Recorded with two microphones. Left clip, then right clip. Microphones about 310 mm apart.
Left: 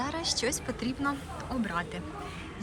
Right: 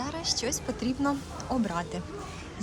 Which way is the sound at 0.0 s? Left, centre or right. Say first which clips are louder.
Even; centre.